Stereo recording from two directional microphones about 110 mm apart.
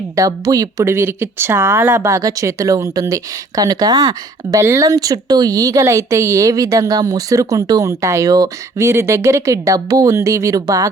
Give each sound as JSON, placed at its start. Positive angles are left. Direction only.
{"t": 0.2, "sound": "speech", "side_deg": -30}